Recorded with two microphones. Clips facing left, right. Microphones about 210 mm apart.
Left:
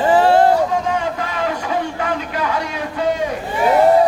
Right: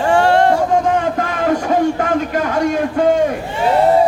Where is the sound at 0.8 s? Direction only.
50° right (ahead or behind).